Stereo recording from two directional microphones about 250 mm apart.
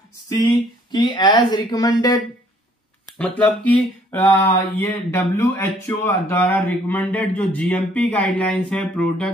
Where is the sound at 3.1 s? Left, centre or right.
Centre.